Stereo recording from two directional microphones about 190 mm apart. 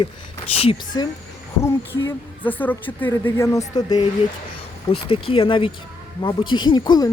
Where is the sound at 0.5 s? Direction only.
30° left (ahead or behind).